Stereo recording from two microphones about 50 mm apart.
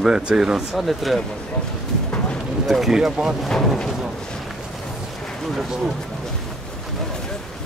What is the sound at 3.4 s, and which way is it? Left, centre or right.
Speech, centre.